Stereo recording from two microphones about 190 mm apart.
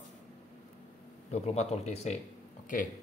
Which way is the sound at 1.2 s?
35° left (ahead or behind).